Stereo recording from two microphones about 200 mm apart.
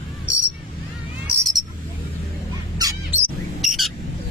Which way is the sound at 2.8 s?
20° right (ahead or behind).